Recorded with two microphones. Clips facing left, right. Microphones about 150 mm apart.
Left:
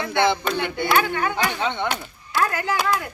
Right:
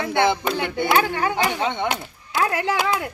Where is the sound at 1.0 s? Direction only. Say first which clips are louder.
Even; 30° right (ahead or behind).